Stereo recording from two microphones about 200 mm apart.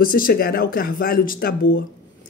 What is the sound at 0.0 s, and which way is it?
Speech, 45° left (ahead or behind).